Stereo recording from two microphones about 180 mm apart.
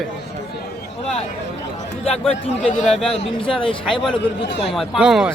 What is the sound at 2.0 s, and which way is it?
A man's voice, 35° left (ahead or behind).